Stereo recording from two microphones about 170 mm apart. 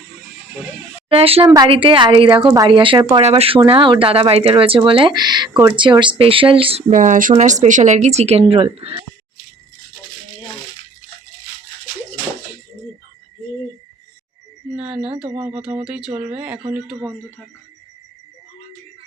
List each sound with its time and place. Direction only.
1.1 s speech: 35° right (ahead or behind)
1.5 s speech: 20° right (ahead or behind)
6.9 s speech: 50° right (ahead or behind)
14.8 s speech: 5° right (ahead or behind)